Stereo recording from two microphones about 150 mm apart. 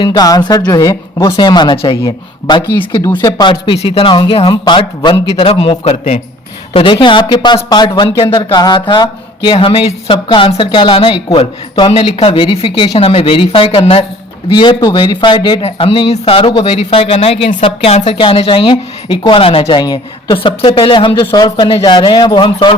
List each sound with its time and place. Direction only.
0.0 s speech: 25° left (ahead or behind)
5.8 s a man's voice: 45° left (ahead or behind)
6.7 s speech: 35° left (ahead or behind)
19.8 s speech: 30° left (ahead or behind)